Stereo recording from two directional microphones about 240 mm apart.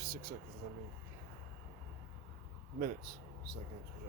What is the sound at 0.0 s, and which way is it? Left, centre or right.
Vehicle, right.